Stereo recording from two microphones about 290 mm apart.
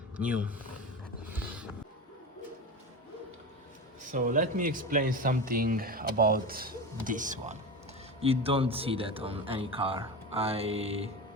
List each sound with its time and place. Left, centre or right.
0.2 s speech: centre
4.1 s speech: right